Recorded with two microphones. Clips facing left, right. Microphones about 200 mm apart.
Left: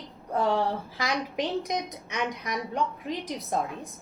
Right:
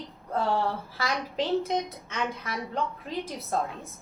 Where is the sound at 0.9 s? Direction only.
15° left (ahead or behind).